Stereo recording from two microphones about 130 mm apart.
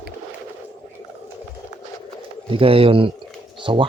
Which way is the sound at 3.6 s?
40° right (ahead or behind).